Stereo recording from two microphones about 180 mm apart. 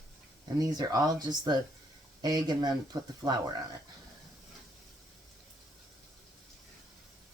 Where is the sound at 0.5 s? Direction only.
20° right (ahead or behind).